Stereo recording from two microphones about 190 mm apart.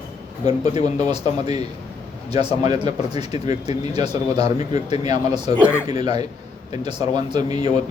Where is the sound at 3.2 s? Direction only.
35° left (ahead or behind).